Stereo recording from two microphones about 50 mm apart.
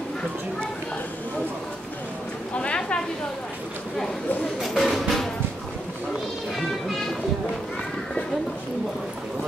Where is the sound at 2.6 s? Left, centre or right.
Left.